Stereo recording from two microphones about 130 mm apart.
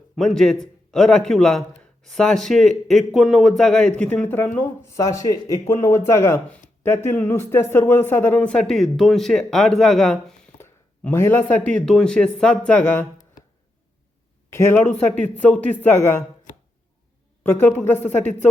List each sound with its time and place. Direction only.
0.2 s a man's voice: 5° left (ahead or behind)
10.6 s speech: 20° left (ahead or behind)
14.5 s speech: 20° left (ahead or behind)
17.4 s speech: 15° left (ahead or behind)